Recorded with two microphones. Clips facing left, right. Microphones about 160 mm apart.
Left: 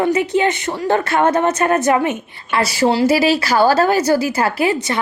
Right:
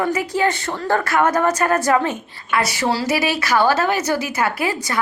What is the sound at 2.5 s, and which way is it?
A woman's voice, 30° left (ahead or behind).